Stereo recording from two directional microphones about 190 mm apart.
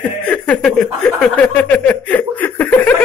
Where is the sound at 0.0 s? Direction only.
5° left (ahead or behind).